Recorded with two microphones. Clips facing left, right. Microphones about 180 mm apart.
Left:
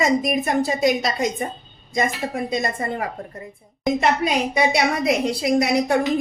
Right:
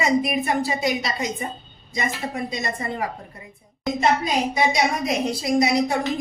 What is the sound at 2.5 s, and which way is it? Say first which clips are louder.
Speech: left 4 dB; 55° left (ahead or behind).